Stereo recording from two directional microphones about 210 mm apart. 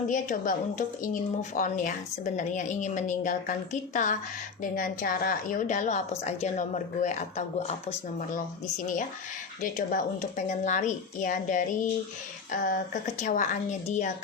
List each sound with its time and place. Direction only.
0.1 s a woman's voice: 40° left (ahead or behind)
9.6 s a woman's voice: 40° left (ahead or behind)